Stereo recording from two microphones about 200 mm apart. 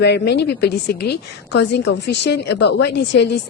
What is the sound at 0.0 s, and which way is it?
A woman's voice, 55° left (ahead or behind).